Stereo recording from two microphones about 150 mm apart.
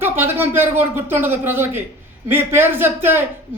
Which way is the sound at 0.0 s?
15° right (ahead or behind).